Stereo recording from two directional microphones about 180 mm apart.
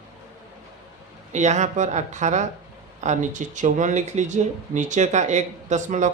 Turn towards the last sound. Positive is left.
turn(degrees=-45)  # may be behind; listen again after turning